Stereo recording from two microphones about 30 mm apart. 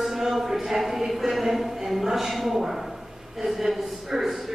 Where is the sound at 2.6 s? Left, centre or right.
Centre.